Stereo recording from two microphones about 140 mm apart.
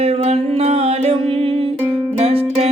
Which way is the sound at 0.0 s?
45° right (ahead or behind).